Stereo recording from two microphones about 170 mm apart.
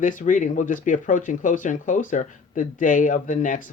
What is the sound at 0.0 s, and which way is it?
Speech, 50° left (ahead or behind).